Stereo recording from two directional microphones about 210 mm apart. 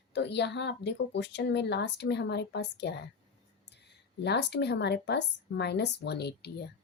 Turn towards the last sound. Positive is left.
turn(degrees=50)  # may be behind; listen again after turning